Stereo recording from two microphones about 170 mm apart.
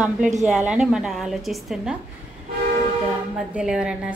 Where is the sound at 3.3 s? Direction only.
5° right (ahead or behind).